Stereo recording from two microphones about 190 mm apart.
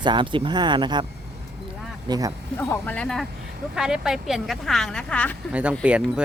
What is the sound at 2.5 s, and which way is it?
Speech, 10° left (ahead or behind).